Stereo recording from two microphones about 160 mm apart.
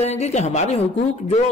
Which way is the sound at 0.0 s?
40° left (ahead or behind).